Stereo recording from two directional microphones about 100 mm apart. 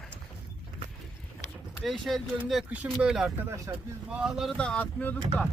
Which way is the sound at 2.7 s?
10° right (ahead or behind).